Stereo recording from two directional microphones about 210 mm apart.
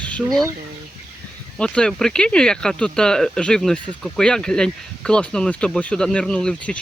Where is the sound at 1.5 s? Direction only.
5° left (ahead or behind).